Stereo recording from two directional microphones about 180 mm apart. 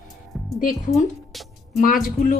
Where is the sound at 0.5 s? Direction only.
50° left (ahead or behind).